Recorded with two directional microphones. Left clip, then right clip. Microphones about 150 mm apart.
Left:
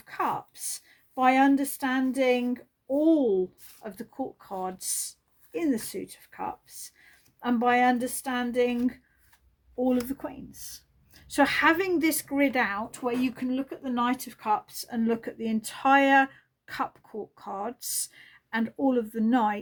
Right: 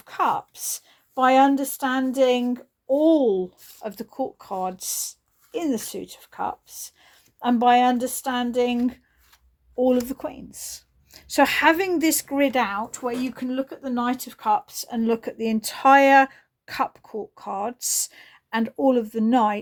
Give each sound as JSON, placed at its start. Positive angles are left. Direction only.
{"t": 0.0, "sound": "a woman's voice", "side_deg": -40}
{"t": 10.1, "sound": "a woman's voice", "side_deg": -35}
{"t": 12.9, "sound": "speech", "side_deg": -20}
{"t": 13.3, "sound": "speech", "side_deg": -35}
{"t": 17.2, "sound": "speech", "side_deg": -35}